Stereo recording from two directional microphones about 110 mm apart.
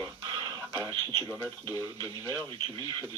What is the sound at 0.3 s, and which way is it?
Radio, 40° right (ahead or behind).